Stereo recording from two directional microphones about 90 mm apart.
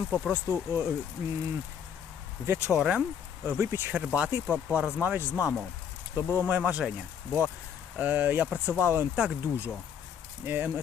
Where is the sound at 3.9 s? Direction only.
10° right (ahead or behind).